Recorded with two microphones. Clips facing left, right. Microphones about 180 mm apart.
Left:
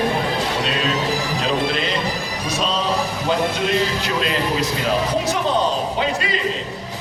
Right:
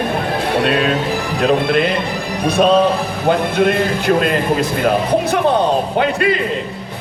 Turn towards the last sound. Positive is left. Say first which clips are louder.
# right 6 dB
turn(degrees=-60)  # may be behind; listen again after turning